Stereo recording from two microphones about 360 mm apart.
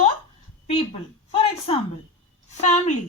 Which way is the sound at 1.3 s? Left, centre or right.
Centre.